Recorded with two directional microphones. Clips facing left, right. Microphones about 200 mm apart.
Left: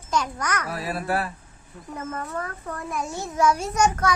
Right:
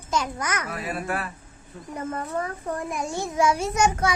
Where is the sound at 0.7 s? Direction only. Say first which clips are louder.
Left 2 dB; 35° left (ahead or behind).